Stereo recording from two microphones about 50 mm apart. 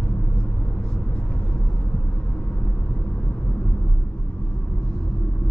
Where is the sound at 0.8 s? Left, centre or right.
Centre.